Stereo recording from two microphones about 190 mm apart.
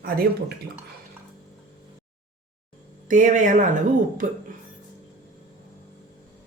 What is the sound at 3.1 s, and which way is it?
Speech, 40° right (ahead or behind).